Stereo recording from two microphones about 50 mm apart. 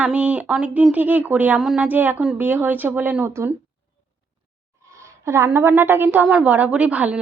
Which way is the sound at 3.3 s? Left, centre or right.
Right.